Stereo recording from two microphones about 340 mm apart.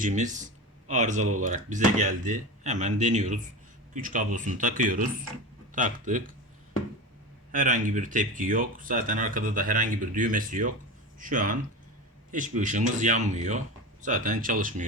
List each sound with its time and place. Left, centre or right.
0.0 s speech: right
7.5 s speech: right